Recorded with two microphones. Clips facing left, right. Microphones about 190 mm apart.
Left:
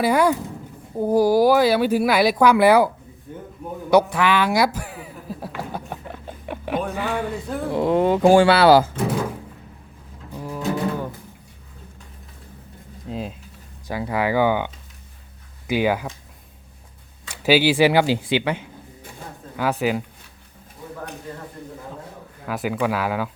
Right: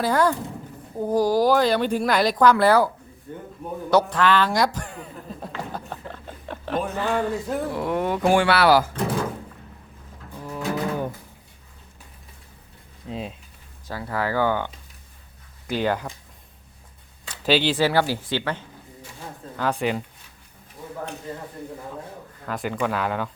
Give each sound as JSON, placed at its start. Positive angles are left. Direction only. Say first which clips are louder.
{"t": 0.0, "sound": "a man's voice", "louder": "left 3 dB", "side_deg": 10}
{"t": 6.1, "sound": "rodents", "louder": "left 3 dB", "side_deg": 15}
{"t": 6.9, "sound": "a man's voice", "louder": "right 1 dB", "side_deg": 10}
{"t": 7.3, "sound": "speech", "louder": "right 2 dB", "side_deg": 0}
{"t": 7.7, "sound": "speech", "louder": "left 9 dB", "side_deg": 25}
{"t": 13.1, "sound": "speech", "louder": "left 2 dB", "side_deg": 0}
{"t": 13.8, "sound": "a man's voice", "louder": "left 4 dB", "side_deg": 15}
{"t": 17.2, "sound": "a man's voice", "louder": "left 4 dB", "side_deg": 10}
{"t": 22.4, "sound": "speech", "louder": "left 3 dB", "side_deg": 5}